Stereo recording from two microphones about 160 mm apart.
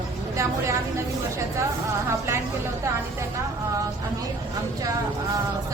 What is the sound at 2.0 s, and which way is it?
Speech, 15° right (ahead or behind).